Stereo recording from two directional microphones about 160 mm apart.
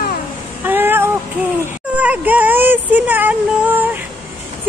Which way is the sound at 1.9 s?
10° right (ahead or behind).